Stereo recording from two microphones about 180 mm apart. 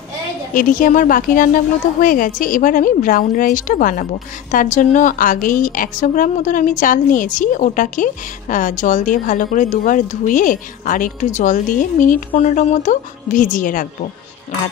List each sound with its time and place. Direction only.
0.6 s speech: 50° left (ahead or behind)